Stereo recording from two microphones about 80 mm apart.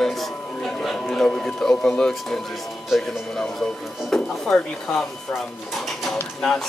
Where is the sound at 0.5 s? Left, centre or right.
Centre.